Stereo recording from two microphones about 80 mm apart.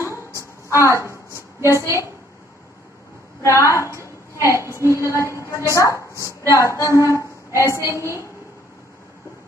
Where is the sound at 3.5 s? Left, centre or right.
Left.